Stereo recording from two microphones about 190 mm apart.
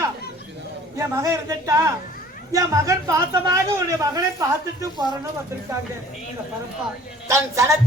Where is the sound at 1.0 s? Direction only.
15° right (ahead or behind).